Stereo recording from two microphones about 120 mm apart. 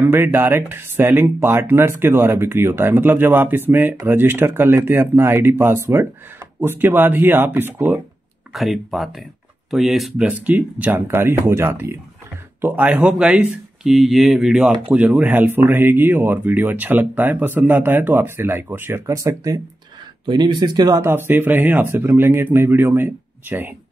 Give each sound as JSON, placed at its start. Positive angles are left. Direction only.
{"t": 0.0, "sound": "speech", "side_deg": -20}
{"t": 8.5, "sound": "speech", "side_deg": 0}
{"t": 10.2, "sound": "speech", "side_deg": -10}
{"t": 20.2, "sound": "speech", "side_deg": -40}
{"t": 21.0, "sound": "speech", "side_deg": -20}